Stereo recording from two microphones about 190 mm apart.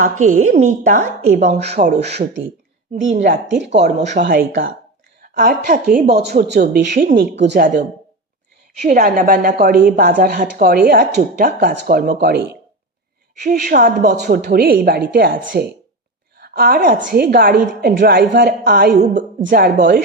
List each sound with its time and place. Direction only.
0.0 s a woman's voice: 40° right (ahead or behind)
2.0 s speech: 60° right (ahead or behind)
2.9 s a woman's voice: 45° right (ahead or behind)
4.0 s a woman's voice: 65° right (ahead or behind)
8.8 s a woman's voice: 45° right (ahead or behind)
14.3 s a woman's voice: 55° right (ahead or behind)
18.9 s a woman's voice: 40° right (ahead or behind)